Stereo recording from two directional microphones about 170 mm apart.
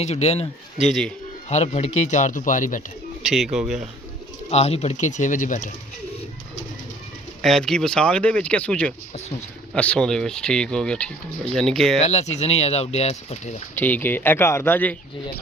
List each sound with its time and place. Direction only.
0.0 s speech: 40° left (ahead or behind)
0.8 s speech: centre (ahead or behind)
1.5 s speech: 40° left (ahead or behind)
3.2 s speech: centre (ahead or behind)
4.4 s speech: 40° left (ahead or behind)
7.4 s speech: 5° left (ahead or behind)
11.9 s speech: 40° left (ahead or behind)
13.7 s speech: 10° left (ahead or behind)